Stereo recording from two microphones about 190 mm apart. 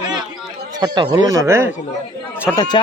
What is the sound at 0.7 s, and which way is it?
Speech, 20° right (ahead or behind).